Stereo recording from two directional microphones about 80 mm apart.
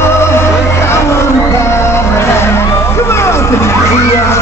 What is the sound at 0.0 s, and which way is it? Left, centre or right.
Music, left.